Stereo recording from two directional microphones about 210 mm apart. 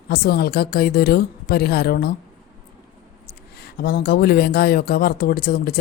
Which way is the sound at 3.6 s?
50° left (ahead or behind).